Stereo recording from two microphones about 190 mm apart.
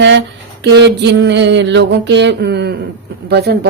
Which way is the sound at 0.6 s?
65° right (ahead or behind).